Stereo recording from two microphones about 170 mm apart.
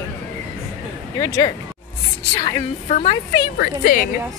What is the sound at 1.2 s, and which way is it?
Speech, 20° left (ahead or behind).